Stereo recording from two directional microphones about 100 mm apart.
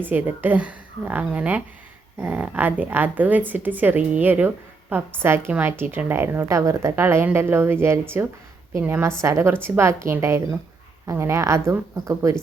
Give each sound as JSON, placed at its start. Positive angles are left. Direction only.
{"t": 0.0, "sound": "a woman's voice", "side_deg": -15}